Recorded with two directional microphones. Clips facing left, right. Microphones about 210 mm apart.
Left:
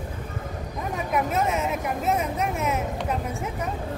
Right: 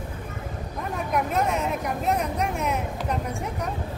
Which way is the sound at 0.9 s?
Centre (ahead or behind).